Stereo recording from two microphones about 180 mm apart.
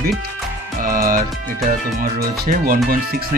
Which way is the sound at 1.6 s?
50° right (ahead or behind).